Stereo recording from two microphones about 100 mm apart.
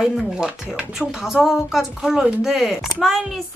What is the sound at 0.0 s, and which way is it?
Speech, 5° right (ahead or behind).